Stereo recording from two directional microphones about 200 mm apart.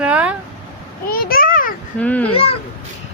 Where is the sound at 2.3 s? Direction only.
30° left (ahead or behind).